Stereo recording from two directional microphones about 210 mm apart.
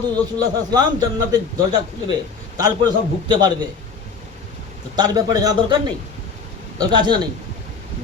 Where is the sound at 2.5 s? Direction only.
20° right (ahead or behind).